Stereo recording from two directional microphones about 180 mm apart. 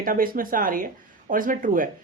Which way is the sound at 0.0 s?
50° right (ahead or behind).